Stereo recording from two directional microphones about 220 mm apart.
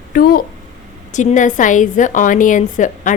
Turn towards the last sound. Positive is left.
turn(degrees=35)  # may be behind; listen again after turning